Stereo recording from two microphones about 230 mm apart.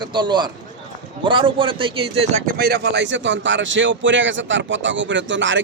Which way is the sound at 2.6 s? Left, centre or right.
Right.